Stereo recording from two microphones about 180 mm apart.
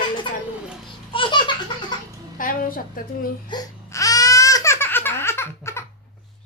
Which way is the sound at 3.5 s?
20° left (ahead or behind).